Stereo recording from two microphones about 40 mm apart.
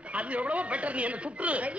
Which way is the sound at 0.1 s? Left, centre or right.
Right.